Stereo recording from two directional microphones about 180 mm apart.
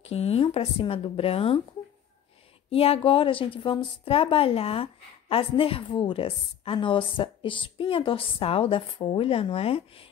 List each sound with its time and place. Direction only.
0.1 s a woman's voice: 35° left (ahead or behind)
2.7 s a woman's voice: 30° left (ahead or behind)